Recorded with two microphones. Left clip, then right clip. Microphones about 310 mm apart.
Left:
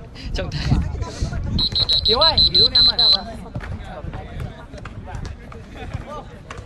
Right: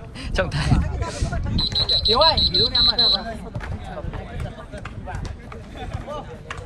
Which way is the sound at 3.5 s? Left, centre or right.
Right.